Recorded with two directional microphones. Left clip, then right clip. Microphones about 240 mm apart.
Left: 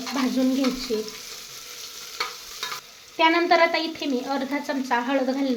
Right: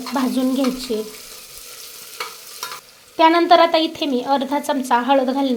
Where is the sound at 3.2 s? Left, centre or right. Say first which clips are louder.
Right 6 dB; right.